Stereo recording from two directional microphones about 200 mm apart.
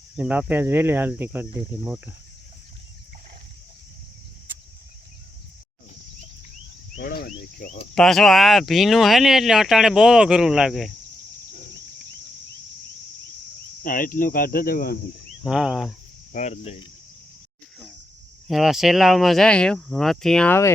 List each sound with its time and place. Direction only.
0.2 s speech: 5° right (ahead or behind)
7.0 s cricket: 50° left (ahead or behind)
7.6 s speech: 50° left (ahead or behind)
7.9 s speech: centre (ahead or behind)
13.8 s speech: 45° left (ahead or behind)
15.4 s speech: 5° right (ahead or behind)
16.3 s speech: 35° left (ahead or behind)
18.4 s speech: centre (ahead or behind)